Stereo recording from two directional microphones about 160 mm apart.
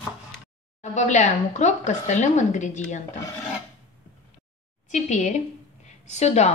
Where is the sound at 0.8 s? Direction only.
45° left (ahead or behind).